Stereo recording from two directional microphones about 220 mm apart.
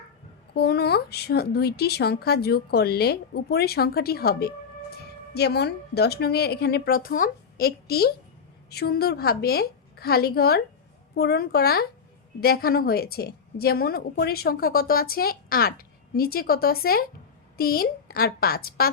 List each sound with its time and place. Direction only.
0.5 s speech: 45° left (ahead or behind)